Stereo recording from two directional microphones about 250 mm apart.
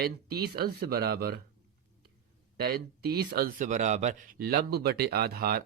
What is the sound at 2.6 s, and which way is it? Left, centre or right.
Speech, right.